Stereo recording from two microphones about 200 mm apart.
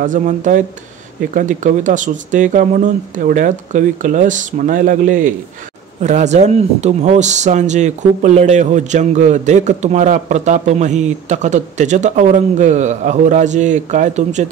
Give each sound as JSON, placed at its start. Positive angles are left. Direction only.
{"t": 0.0, "sound": "speech", "side_deg": -40}